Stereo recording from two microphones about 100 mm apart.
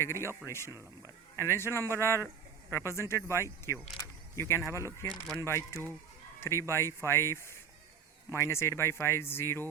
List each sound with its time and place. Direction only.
0.0 s speech: 25° left (ahead or behind)
0.7 s speech: 30° right (ahead or behind)
1.4 s speech: 25° left (ahead or behind)